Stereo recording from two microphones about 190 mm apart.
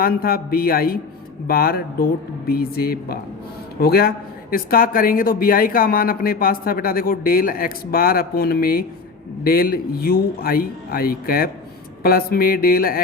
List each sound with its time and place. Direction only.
0.0 s speech: 50° left (ahead or behind)